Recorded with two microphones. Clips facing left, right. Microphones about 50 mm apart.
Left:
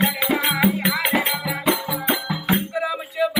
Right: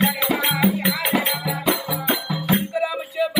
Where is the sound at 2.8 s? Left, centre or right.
Centre.